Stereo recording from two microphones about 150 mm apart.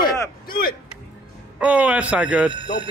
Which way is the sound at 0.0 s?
80° left.